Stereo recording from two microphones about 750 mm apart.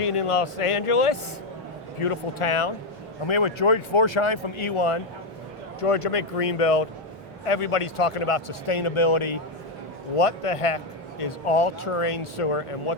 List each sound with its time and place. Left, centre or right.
0.0 s a man's voice: left